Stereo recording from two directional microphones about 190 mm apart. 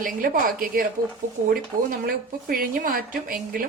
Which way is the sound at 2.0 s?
50° right (ahead or behind).